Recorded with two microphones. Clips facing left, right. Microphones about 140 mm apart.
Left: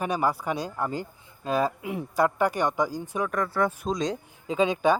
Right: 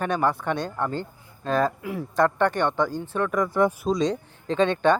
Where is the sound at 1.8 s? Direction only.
20° left (ahead or behind).